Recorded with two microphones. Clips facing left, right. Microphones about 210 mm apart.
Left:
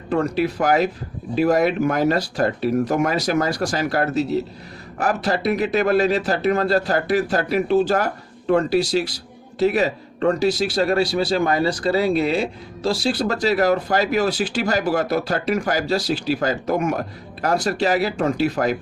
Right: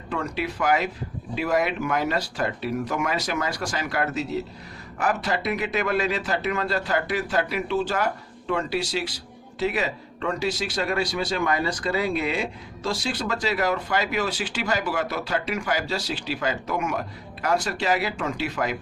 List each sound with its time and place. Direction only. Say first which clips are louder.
0.1 s a man's voice: left 8 dB; 40° left (ahead or behind)